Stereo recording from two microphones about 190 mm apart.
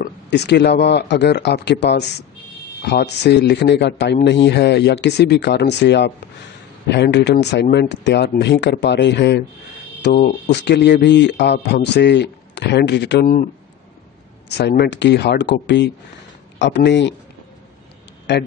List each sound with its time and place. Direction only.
0.0 s speech: 65° left (ahead or behind)
14.6 s speech: 60° left (ahead or behind)
18.3 s speech: 65° left (ahead or behind)